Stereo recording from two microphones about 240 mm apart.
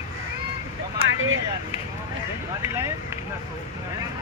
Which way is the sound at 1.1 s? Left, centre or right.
Right.